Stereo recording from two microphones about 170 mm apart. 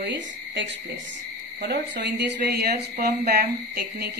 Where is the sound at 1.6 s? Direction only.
70° right (ahead or behind).